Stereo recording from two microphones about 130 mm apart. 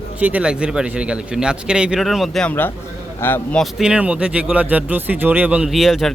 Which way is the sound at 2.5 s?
15° left (ahead or behind).